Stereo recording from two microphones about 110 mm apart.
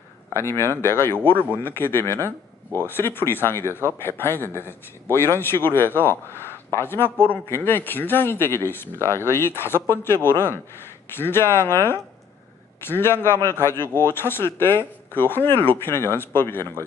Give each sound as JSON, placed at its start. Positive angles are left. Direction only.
{"t": 0.3, "sound": "speech", "side_deg": 25}